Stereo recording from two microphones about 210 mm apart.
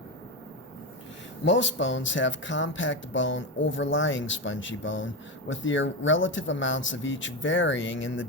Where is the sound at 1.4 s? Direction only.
60° left (ahead or behind).